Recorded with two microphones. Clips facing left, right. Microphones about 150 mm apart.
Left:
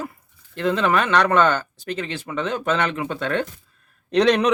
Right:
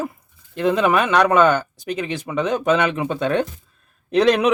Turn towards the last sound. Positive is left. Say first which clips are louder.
# right 1 dB
turn(degrees=-5)  # may be behind; listen again after turning